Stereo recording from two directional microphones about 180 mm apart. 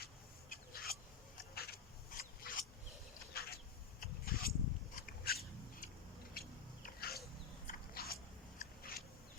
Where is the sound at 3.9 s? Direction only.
55° left (ahead or behind).